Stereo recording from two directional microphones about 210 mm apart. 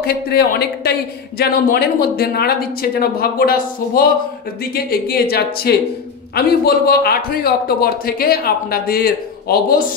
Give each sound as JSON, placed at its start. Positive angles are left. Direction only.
{"t": 0.0, "sound": "a man's voice", "side_deg": 50}